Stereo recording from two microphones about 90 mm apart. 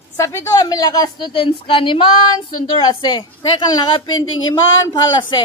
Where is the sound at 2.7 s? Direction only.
55° left (ahead or behind).